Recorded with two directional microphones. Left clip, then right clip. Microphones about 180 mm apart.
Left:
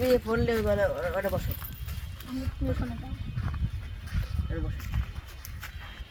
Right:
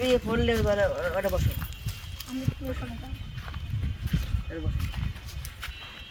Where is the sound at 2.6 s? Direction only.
20° right (ahead or behind).